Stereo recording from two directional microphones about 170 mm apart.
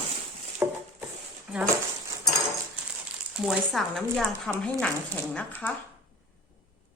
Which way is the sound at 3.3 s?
5° right (ahead or behind).